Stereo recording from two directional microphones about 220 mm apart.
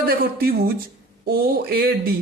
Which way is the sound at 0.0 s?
40° right (ahead or behind).